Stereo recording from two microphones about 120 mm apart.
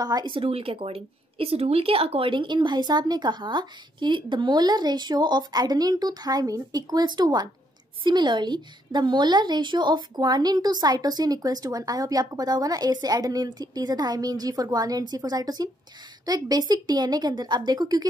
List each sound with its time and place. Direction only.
0.0 s a woman's voice: 35° right (ahead or behind)